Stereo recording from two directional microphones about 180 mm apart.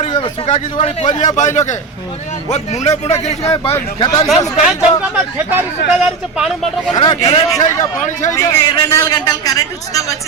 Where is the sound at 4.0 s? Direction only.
20° left (ahead or behind).